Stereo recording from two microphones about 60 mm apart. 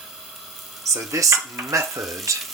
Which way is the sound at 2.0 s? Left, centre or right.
Centre.